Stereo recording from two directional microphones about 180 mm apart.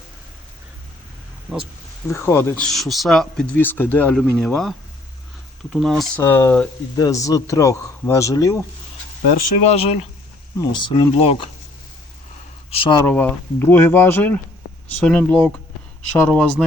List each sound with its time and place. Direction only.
1.5 s speech: centre (ahead or behind)
2.0 s speech: 15° left (ahead or behind)
2.6 s speech: centre (ahead or behind)
5.7 s speech: centre (ahead or behind)
6.1 s speech: 10° left (ahead or behind)
9.7 s speech: 35° left (ahead or behind)
12.7 s speech: 30° left (ahead or behind)
13.0 s speech: 10° left (ahead or behind)